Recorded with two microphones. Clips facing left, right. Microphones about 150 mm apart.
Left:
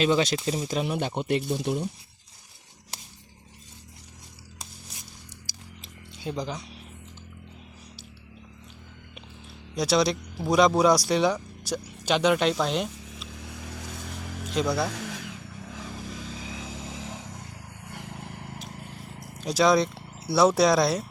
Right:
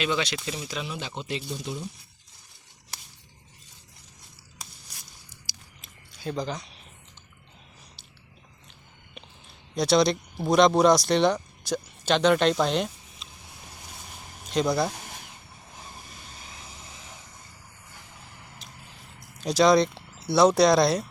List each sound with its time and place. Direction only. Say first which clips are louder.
0.0 s speech: left 5 dB; 40° left (ahead or behind); by 1.8 s 55° left (ahead or behind)
5.8 s a sound: even; 20° left (ahead or behind)
9.7 s speech: right 2 dB; 5° left (ahead or behind)
13.2 s vehicle: left 7 dB; 90° left
14.5 s speech: right 2 dB; 5° left (ahead or behind)
14.8 s vehicle: left 3 dB; 90° left; by 18.6 s 55° left (ahead or behind)
19.4 s speech: right 2 dB; 5° left (ahead or behind)